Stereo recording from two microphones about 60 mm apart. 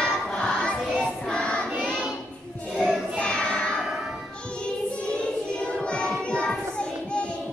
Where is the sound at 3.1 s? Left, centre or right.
Centre.